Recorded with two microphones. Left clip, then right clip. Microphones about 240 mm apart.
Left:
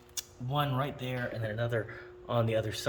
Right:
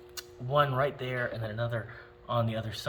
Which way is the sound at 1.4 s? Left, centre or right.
Centre.